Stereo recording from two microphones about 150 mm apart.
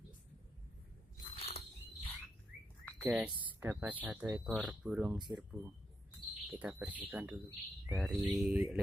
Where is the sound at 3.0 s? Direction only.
10° right (ahead or behind).